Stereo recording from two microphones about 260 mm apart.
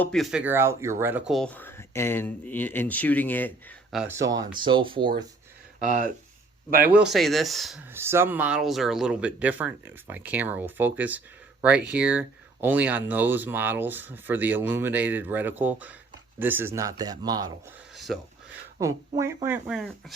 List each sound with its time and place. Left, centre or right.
0.0 s speech: centre
1.3 s speech: centre
4.0 s speech: centre
5.8 s speech: right
6.9 s speech: centre
17.9 s a sound: centre
18.8 s speech: centre